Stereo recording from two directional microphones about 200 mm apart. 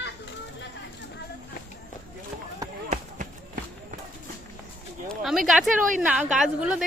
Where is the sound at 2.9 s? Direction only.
40° right (ahead or behind).